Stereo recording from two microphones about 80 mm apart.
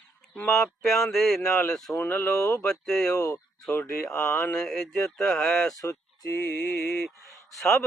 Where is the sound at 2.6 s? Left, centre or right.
Centre.